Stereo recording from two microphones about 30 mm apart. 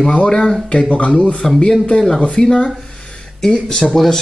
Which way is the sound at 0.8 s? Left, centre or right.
Left.